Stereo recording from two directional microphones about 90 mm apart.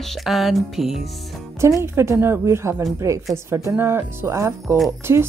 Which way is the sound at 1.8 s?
30° right (ahead or behind).